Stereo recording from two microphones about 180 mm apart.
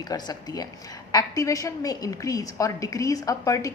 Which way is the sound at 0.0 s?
20° left (ahead or behind).